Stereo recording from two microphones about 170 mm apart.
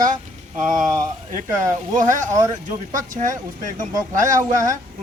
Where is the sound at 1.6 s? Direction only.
50° right (ahead or behind).